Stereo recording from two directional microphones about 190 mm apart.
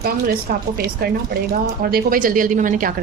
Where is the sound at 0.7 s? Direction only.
55° right (ahead or behind).